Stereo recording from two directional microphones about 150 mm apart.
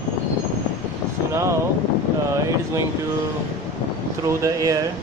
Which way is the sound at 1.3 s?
20° right (ahead or behind).